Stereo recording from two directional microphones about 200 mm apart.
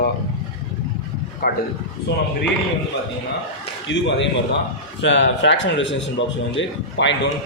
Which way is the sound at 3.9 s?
60° left (ahead or behind).